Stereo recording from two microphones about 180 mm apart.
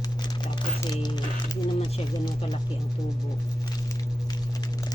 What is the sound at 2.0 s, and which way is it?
Speech, 25° left (ahead or behind).